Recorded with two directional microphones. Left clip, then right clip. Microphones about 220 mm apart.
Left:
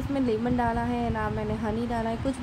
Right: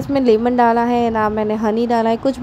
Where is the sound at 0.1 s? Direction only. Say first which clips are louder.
Right 13 dB; 35° right (ahead or behind).